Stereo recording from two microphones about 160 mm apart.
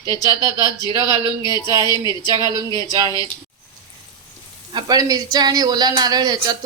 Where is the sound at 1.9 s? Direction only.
25° left (ahead or behind).